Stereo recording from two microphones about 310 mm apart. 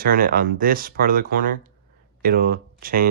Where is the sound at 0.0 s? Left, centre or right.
Right.